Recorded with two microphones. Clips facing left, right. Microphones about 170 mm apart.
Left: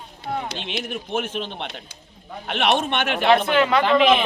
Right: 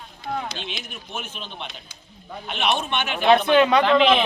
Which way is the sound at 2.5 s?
85° left.